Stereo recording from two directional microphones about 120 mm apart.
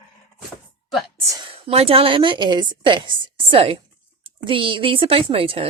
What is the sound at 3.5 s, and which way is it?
A woman's voice, 55° right (ahead or behind).